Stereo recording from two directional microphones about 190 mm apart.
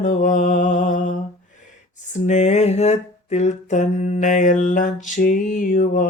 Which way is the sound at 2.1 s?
35° left (ahead or behind).